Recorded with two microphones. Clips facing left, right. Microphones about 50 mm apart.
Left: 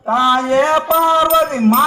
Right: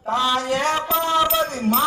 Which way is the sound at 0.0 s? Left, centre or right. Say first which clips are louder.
Left 7 dB; left.